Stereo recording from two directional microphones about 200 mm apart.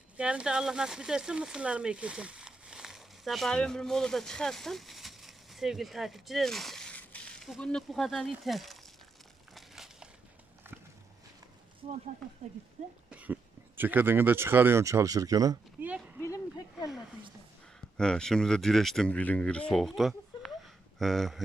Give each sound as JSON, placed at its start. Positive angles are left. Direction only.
{"t": 0.2, "sound": "speech", "side_deg": -5}
{"t": 9.6, "sound": "crushing", "side_deg": 0}
{"t": 12.4, "sound": "speech", "side_deg": -30}
{"t": 13.1, "sound": "speech", "side_deg": -5}
{"t": 16.2, "sound": "speech", "side_deg": 15}
{"t": 17.9, "sound": "speech", "side_deg": 5}